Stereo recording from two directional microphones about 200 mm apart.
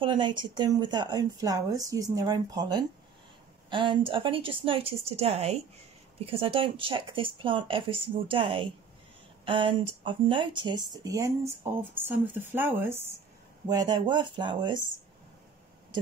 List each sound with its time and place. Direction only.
0.0 s speech: 25° right (ahead or behind)